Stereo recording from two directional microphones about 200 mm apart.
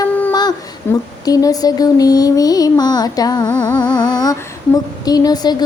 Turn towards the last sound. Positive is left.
turn(degrees=20)  # may be behind; listen again after turning